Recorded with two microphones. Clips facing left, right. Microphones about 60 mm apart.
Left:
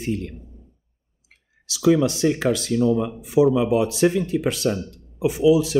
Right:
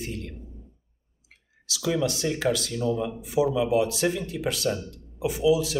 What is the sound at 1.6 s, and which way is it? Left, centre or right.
Speech, left.